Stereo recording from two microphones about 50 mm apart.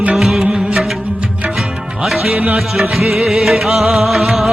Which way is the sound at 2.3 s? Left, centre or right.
Right.